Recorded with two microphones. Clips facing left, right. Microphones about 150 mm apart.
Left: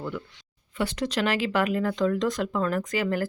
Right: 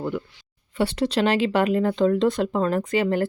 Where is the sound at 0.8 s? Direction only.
30° right (ahead or behind).